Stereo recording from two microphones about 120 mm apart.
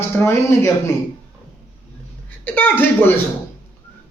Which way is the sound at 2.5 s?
15° left (ahead or behind).